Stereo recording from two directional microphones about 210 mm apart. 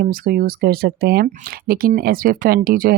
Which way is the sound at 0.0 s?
45° right (ahead or behind).